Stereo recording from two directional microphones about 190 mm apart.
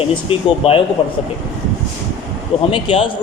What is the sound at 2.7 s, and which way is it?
Speech, 30° left (ahead or behind).